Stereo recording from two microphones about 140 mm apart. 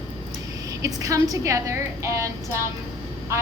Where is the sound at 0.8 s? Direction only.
25° right (ahead or behind).